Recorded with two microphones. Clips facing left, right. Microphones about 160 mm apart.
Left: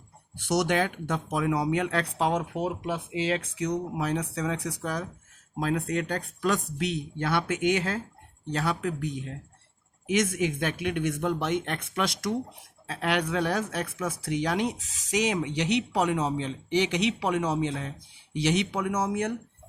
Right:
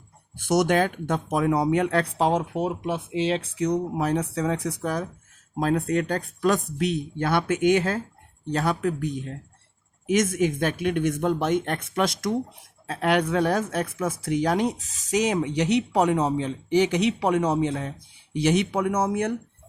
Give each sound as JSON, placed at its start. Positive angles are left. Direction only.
{"t": 0.3, "sound": "speech", "side_deg": -50}
{"t": 3.6, "sound": "speech", "side_deg": -45}